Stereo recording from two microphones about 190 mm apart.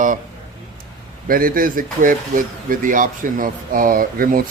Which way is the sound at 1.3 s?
50° right (ahead or behind).